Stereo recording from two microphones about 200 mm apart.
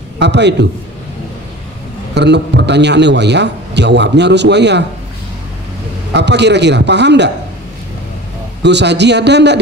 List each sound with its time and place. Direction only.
0.2 s a man's voice: 60° right (ahead or behind)
2.1 s a man's voice: 60° right (ahead or behind)
6.1 s a man's voice: 60° right (ahead or behind)
8.6 s a man's voice: 60° right (ahead or behind)